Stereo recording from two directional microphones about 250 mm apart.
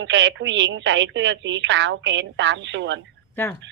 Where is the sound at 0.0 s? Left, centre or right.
Right.